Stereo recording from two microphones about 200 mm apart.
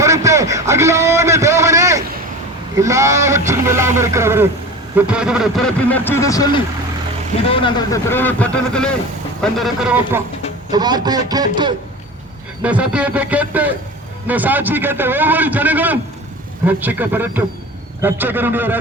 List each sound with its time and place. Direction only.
0.0 s a sound: 15° right (ahead or behind)
2.7 s a man's voice: 15° right (ahead or behind)
10.7 s a man's voice: 20° right (ahead or behind)
12.6 s a man's voice: 5° right (ahead or behind)